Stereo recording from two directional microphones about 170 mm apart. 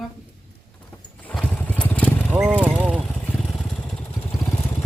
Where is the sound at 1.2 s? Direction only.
10° left (ahead or behind).